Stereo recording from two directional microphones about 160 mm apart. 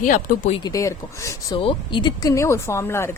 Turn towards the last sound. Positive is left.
turn(degrees=15)  # may be behind; listen again after turning